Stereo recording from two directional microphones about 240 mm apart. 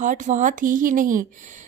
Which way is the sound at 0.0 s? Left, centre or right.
Right.